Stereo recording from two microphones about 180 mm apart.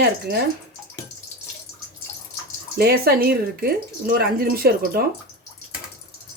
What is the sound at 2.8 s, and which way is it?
Speech, 60° right (ahead or behind).